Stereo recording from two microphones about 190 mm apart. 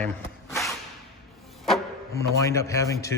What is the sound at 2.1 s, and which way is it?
A man's voice, 15° left (ahead or behind).